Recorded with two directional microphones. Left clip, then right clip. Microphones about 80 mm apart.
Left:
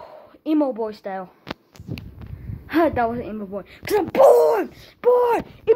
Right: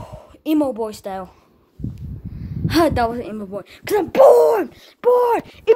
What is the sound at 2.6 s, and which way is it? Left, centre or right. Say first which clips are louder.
A woman's voice: right 2 dB; right.